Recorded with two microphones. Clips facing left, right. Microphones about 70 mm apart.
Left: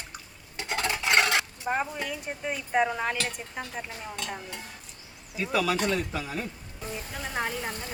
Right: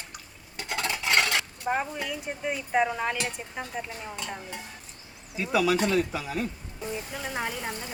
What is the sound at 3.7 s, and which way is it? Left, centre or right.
Speech, centre.